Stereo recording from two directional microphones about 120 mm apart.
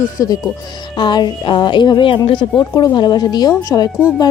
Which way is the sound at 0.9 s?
40° left (ahead or behind).